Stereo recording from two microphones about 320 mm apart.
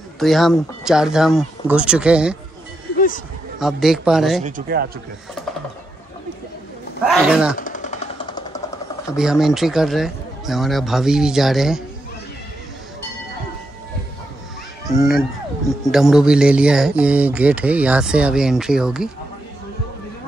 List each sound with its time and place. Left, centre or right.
0.2 s speech: centre
3.5 s speech: centre
4.5 s speech: right
7.1 s speech: centre
7.5 s a sound: left
9.1 s speech: centre
14.9 s speech: centre